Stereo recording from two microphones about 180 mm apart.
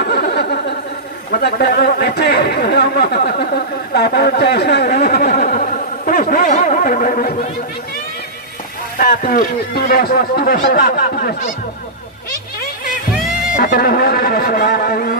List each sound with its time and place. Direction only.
0.1 s a sound: 60° left (ahead or behind)
1.3 s speech: 60° left (ahead or behind)
9.0 s speech: 55° left (ahead or behind)
13.6 s speech: 55° left (ahead or behind)